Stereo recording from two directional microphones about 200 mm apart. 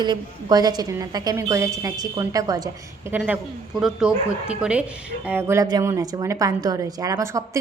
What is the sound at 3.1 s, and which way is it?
A woman's voice, 5° right (ahead or behind).